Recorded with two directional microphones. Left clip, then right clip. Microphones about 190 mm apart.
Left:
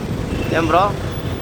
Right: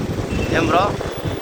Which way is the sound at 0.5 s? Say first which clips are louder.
Left 2 dB; 15° left (ahead or behind).